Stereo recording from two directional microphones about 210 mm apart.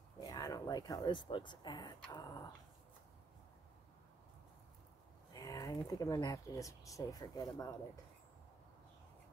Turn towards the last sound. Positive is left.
turn(degrees=15)  # may be behind; listen again after turning